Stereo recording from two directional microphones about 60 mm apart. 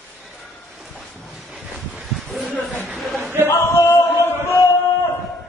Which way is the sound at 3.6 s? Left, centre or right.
Left.